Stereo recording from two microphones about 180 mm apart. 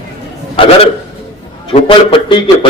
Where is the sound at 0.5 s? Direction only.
30° left (ahead or behind).